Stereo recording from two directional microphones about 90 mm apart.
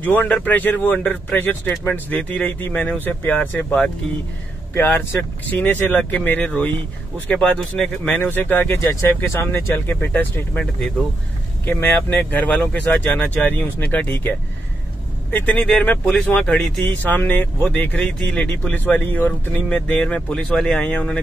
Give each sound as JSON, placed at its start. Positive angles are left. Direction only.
{"t": 0.0, "sound": "speech", "side_deg": 20}
{"t": 8.2, "sound": "speech", "side_deg": 20}
{"t": 15.3, "sound": "speech", "side_deg": 20}